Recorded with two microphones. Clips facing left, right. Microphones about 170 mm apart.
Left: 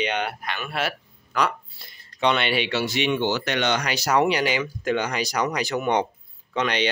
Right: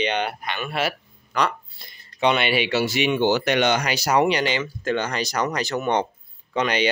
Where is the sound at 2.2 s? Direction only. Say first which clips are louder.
Right 2 dB; 5° right (ahead or behind); by 6.1 s 15° left (ahead or behind).